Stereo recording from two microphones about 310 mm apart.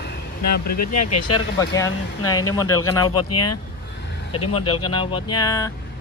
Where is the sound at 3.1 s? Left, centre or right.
Left.